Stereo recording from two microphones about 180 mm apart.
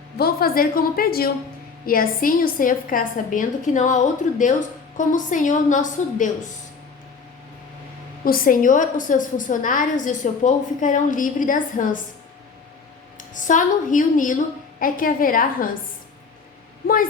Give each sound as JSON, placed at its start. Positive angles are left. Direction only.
{"t": 0.2, "sound": "a woman's voice", "side_deg": 60}
{"t": 8.2, "sound": "a woman's voice", "side_deg": 50}
{"t": 13.3, "sound": "a woman's voice", "side_deg": 45}
{"t": 16.8, "sound": "a woman's voice", "side_deg": 50}